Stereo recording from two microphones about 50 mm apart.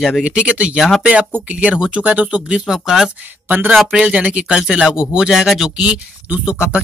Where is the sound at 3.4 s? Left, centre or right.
Right.